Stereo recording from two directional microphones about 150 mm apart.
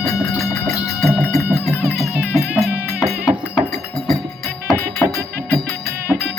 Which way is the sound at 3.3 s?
30° right (ahead or behind).